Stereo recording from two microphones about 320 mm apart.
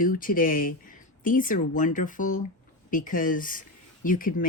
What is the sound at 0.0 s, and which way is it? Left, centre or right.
Speech, left.